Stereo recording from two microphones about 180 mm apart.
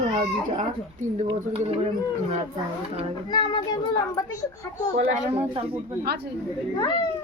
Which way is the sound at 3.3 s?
25° left (ahead or behind).